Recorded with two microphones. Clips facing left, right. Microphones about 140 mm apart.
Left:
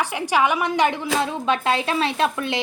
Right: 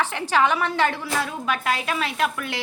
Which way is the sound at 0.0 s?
15° left (ahead or behind).